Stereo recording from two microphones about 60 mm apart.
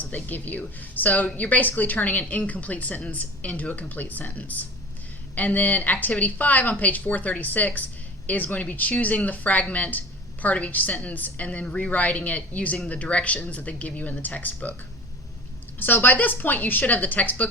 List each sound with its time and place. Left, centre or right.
0.0 s a woman's voice: left
15.8 s a woman's voice: left